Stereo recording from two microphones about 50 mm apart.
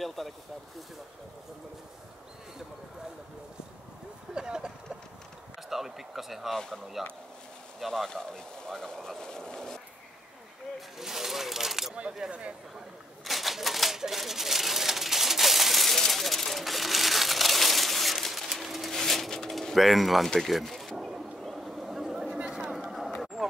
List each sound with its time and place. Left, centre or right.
0.0 s speech: centre
4.3 s vehicle: centre
5.7 s speech: centre
6.5 s speech: centre
7.9 s speech: centre
11.0 s speech: centre
12.3 s speech: right
13.2 s typewriter: centre
20.2 s speech: centre
20.9 s a sound: centre